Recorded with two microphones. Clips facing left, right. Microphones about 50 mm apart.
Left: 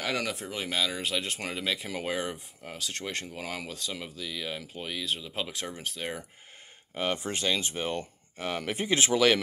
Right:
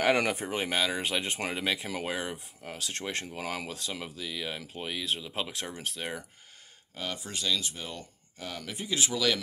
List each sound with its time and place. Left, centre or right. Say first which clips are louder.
0.0 s speech: right 6 dB; right
1.8 s speech: left 1 dB; centre
7.0 s speech: left 6 dB; left